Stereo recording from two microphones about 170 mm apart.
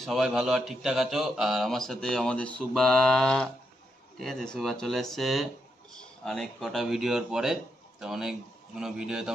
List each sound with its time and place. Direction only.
0.0 s a man's voice: centre (ahead or behind)